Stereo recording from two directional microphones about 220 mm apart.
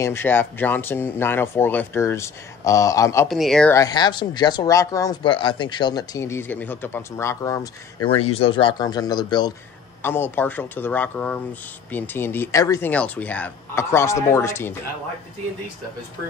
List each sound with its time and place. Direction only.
0.0 s speech: 10° left (ahead or behind)
3.3 s speech: centre (ahead or behind)
3.7 s speech: 20° left (ahead or behind)
8.1 s speech: 25° left (ahead or behind); by 14.8 s 10° left (ahead or behind)